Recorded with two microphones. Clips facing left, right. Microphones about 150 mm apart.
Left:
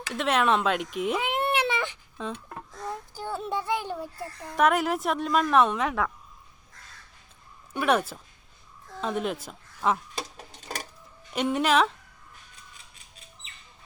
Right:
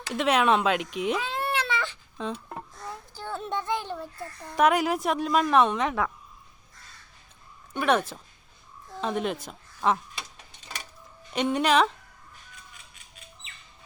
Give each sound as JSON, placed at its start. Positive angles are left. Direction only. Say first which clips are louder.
{"t": 0.1, "sound": "speech", "louder": "right 2 dB", "side_deg": 0}
{"t": 1.2, "sound": "cat", "louder": "left 3 dB", "side_deg": 20}
{"t": 2.3, "sound": "a sound", "louder": "right 2 dB", "side_deg": -10}
{"t": 3.2, "sound": "speech", "louder": "even", "side_deg": 10}
{"t": 7.7, "sound": "speech", "louder": "even", "side_deg": 5}
{"t": 10.2, "sound": "a sound", "louder": "left 6 dB", "side_deg": 40}
{"t": 11.3, "sound": "speech", "louder": "right 1 dB", "side_deg": 5}